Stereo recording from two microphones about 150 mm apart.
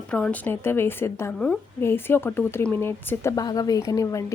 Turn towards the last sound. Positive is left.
turn(degrees=20)  # may be behind; listen again after turning